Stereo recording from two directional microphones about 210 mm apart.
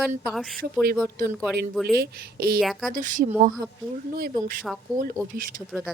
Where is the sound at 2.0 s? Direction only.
50° right (ahead or behind).